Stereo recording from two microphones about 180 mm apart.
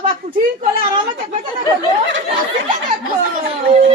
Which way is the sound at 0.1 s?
50° right (ahead or behind).